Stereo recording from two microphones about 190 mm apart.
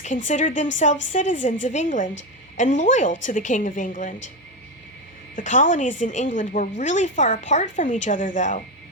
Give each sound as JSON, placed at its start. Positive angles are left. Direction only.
{"t": 0.3, "sound": "a woman's voice", "side_deg": 40}
{"t": 5.4, "sound": "a woman's voice", "side_deg": 40}